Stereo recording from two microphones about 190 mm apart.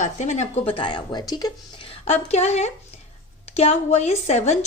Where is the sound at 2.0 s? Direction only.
35° left (ahead or behind).